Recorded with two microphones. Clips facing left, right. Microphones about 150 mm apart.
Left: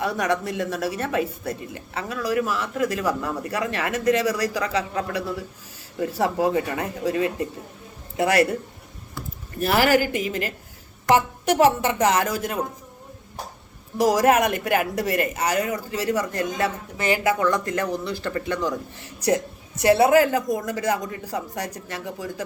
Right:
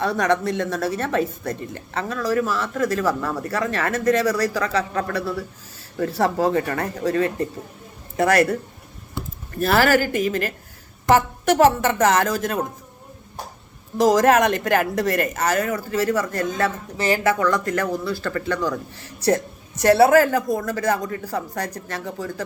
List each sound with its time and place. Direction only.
0.0 s a woman's voice: 10° left (ahead or behind)
9.2 s a sound: 25° right (ahead or behind)
9.6 s a woman's voice: 15° left (ahead or behind)
14.0 s a woman's voice: 10° left (ahead or behind)
19.8 s a woman's voice: 40° right (ahead or behind)
20.6 s a woman's voice: 15° left (ahead or behind)